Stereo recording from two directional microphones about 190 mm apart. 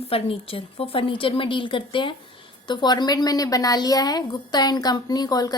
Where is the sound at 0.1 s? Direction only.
30° left (ahead or behind).